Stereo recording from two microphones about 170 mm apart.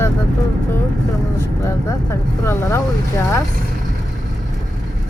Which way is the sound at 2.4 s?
20° left (ahead or behind).